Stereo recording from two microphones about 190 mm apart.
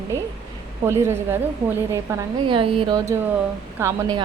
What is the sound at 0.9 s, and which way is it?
A woman's voice, 15° right (ahead or behind).